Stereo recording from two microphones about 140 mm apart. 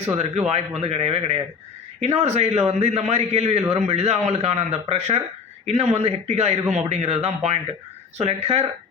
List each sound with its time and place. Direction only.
0.2 s a man's voice: 50° right (ahead or behind)